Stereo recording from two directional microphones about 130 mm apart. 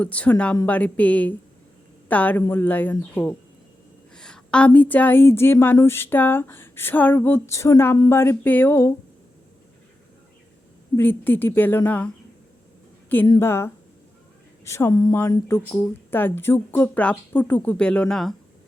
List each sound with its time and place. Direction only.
0.0 s a woman's voice: 10° left (ahead or behind)
10.9 s a woman's voice: 15° left (ahead or behind)
13.4 s a woman's voice: 20° left (ahead or behind); by 18.3 s 5° left (ahead or behind)